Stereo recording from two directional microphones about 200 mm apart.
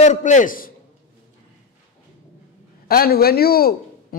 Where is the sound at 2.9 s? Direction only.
50° left (ahead or behind).